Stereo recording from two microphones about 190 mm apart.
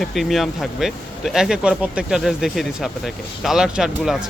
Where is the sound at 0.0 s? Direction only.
Centre (ahead or behind).